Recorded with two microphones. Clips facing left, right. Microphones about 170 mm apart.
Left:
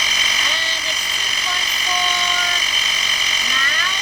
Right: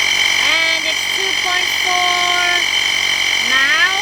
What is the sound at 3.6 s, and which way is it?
Vehicle, 90° right.